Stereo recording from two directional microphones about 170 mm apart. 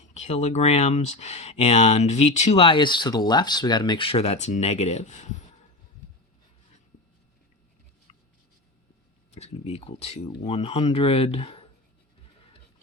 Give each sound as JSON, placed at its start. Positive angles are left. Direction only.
{"t": 0.1, "sound": "speech", "side_deg": 40}
{"t": 9.3, "sound": "speech", "side_deg": 40}